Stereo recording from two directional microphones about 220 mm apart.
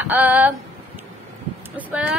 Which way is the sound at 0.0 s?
10° right (ahead or behind).